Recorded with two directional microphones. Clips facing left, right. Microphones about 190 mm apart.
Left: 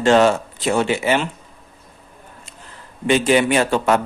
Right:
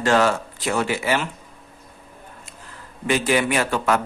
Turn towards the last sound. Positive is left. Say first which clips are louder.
# left 4 dB
turn(degrees=25)  # may be behind; listen again after turning